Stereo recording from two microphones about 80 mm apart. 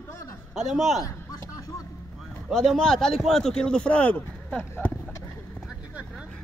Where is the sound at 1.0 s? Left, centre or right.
Left.